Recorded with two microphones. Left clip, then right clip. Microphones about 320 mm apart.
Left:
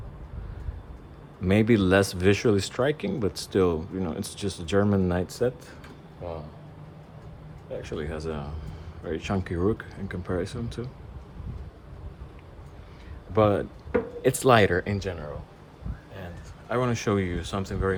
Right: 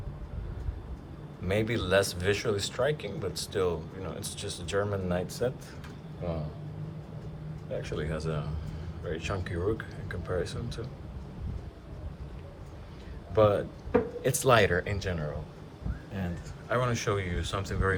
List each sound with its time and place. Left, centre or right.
1.5 s a man's voice: left
7.8 s a man's voice: centre
13.3 s a man's voice: left